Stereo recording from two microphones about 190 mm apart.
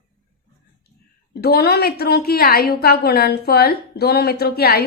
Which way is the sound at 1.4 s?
55° left (ahead or behind).